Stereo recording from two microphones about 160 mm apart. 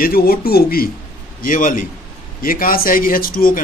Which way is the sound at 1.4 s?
60° left (ahead or behind).